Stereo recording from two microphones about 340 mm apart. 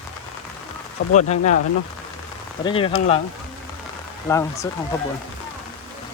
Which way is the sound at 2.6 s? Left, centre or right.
Centre.